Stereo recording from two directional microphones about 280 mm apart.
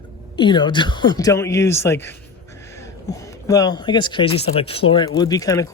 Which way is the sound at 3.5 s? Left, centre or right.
Centre.